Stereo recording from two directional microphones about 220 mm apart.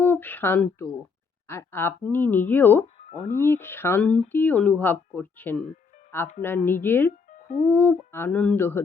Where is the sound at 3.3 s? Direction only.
10° left (ahead or behind).